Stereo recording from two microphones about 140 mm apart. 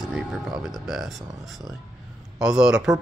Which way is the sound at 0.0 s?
5° right (ahead or behind).